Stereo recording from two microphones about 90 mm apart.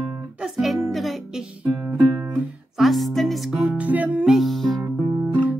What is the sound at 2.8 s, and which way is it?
Music, centre (ahead or behind).